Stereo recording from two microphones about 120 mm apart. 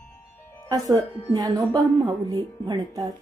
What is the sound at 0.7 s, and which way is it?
Speech, 30° right (ahead or behind).